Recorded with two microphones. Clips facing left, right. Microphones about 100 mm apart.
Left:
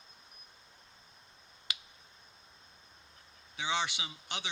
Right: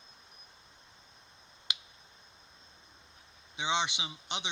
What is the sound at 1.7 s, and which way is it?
Finger snapping, 20° right (ahead or behind).